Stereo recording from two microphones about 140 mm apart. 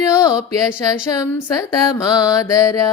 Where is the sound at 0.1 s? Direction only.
5° right (ahead or behind).